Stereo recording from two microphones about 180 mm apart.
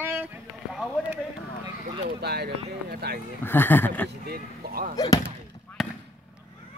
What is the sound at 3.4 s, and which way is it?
Speech, 10° left (ahead or behind).